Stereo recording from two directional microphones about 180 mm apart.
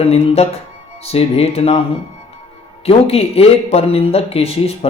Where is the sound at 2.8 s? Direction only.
35° left (ahead or behind).